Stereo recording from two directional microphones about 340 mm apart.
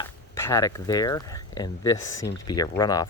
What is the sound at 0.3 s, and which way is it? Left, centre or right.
Speech, centre.